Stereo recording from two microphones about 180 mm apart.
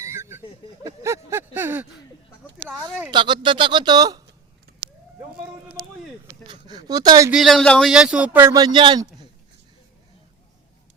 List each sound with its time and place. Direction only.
0.0 s a sound: 15° right (ahead or behind)
3.1 s a man's voice: 25° right (ahead or behind)
6.5 s speech: 20° right (ahead or behind)
7.3 s a man's voice: centre (ahead or behind); by 9.2 s 25° right (ahead or behind)